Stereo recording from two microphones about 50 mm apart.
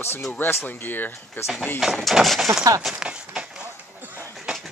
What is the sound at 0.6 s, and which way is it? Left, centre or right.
Speech, left.